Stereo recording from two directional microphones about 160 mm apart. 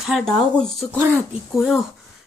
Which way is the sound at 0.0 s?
Centre (ahead or behind).